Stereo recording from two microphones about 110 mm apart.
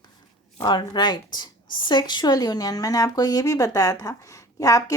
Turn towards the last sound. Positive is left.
turn(degrees=30)  # may be behind; listen again after turning